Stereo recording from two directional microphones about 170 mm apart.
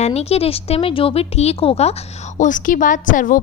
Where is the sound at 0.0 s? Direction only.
40° left (ahead or behind).